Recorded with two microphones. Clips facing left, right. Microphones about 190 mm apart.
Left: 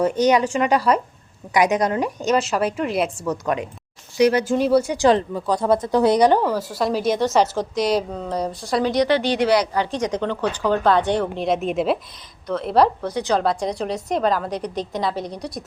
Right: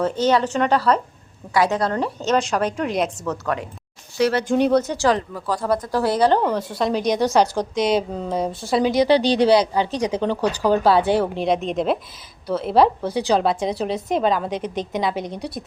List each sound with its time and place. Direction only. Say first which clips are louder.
0.0 s a woman's voice: left 2 dB; 15° left (ahead or behind)
5.0 s a woman's voice: left 3 dB; 20° left (ahead or behind); by 9.0 s 5° right (ahead or behind)
9.2 s a woman's voice: right 3 dB; 30° right (ahead or behind)
10.1 s a woman's voice: right 2 dB; 10° right (ahead or behind)
13.1 s speech: right 2 dB; 30° right (ahead or behind)
13.4 s a woman's voice: right 1 dB; centre (ahead or behind)